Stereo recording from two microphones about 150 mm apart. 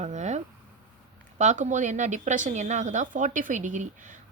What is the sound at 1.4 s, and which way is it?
Speech, 55° right (ahead or behind).